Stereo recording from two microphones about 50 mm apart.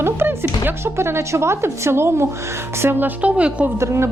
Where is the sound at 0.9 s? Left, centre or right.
Right.